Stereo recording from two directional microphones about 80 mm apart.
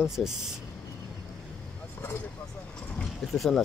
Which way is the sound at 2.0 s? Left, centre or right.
Left.